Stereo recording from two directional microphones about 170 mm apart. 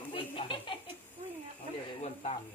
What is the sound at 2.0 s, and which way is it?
Speech, 40° left (ahead or behind).